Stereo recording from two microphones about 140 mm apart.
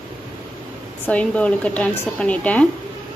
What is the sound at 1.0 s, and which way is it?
A woman's voice, 10° left (ahead or behind).